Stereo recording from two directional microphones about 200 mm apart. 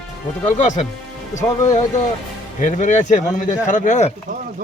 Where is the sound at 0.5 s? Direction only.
35° left (ahead or behind).